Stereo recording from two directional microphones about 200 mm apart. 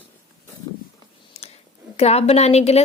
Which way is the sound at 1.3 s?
30° left (ahead or behind).